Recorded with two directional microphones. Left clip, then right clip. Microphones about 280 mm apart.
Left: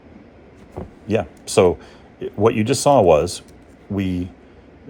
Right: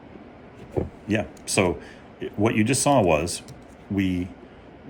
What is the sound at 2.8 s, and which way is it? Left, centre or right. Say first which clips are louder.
Speech: left 8 dB; left.